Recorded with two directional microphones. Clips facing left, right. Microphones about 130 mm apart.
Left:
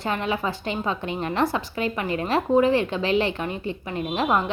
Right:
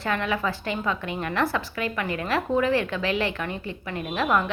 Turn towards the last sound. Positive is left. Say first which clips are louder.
# left 1 dB
turn(degrees=25)  # may be behind; listen again after turning